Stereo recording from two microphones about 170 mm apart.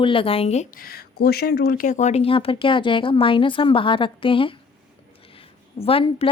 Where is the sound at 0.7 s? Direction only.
60° left (ahead or behind); by 4.6 s 30° left (ahead or behind).